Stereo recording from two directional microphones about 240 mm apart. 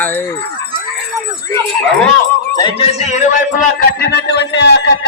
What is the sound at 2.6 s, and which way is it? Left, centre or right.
Speech, left.